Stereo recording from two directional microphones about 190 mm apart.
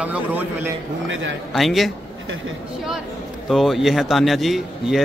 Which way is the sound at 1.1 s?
80° right.